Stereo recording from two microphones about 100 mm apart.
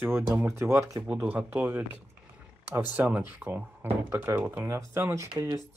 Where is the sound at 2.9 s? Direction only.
15° right (ahead or behind); by 5.6 s 30° right (ahead or behind).